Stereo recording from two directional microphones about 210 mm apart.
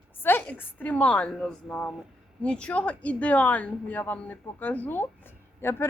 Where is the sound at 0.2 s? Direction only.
10° left (ahead or behind).